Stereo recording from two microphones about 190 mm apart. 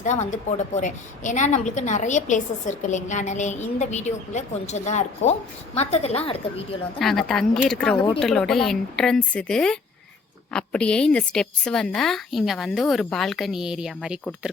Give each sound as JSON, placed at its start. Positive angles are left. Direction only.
{"t": 0.0, "sound": "a woman's voice", "side_deg": 40}
{"t": 7.0, "sound": "a woman's voice", "side_deg": 0}